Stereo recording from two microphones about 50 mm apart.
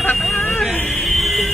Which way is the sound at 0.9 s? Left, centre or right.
Centre.